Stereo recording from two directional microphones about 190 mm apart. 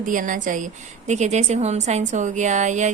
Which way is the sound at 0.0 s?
45° right (ahead or behind).